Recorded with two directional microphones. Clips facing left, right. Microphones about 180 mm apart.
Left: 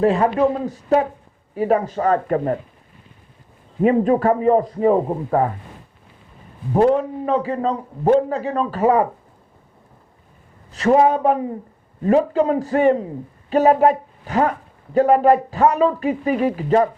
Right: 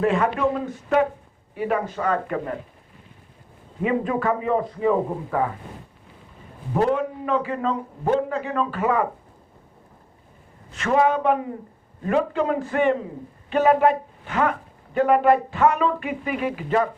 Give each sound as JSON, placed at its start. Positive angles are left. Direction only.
{"t": 0.0, "sound": "a man's voice", "side_deg": 35}
{"t": 3.8, "sound": "a man's voice", "side_deg": 40}
{"t": 6.7, "sound": "a man's voice", "side_deg": 35}
{"t": 10.7, "sound": "a man's voice", "side_deg": 35}